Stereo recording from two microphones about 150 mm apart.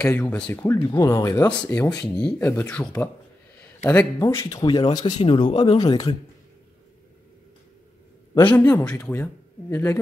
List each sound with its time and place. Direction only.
0.0 s speech: 15° left (ahead or behind); by 5.9 s 30° left (ahead or behind)
8.4 s speech: 15° left (ahead or behind)